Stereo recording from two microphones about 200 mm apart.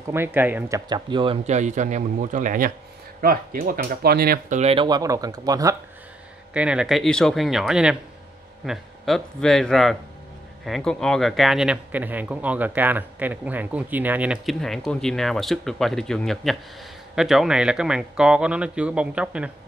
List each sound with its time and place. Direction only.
0.1 s speech: 10° right (ahead or behind); by 4.6 s 50° right (ahead or behind)
4.6 s speech: 30° right (ahead or behind)
6.5 s speech: 5° right (ahead or behind)